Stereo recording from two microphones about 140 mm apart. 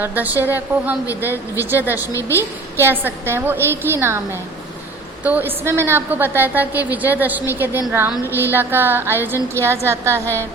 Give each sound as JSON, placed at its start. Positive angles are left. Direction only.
{"t": 0.0, "sound": "a woman's voice", "side_deg": -10}
{"t": 2.1, "sound": "a woman's voice", "side_deg": 20}
{"t": 2.7, "sound": "a woman's voice", "side_deg": -15}
{"t": 5.2, "sound": "a woman's voice", "side_deg": -10}